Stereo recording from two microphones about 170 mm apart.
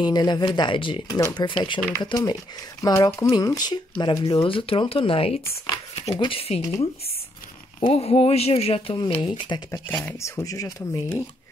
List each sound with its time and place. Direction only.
0.0 s speech: 25° left (ahead or behind)
7.8 s speech: 35° left (ahead or behind)
9.7 s speech: 15° left (ahead or behind)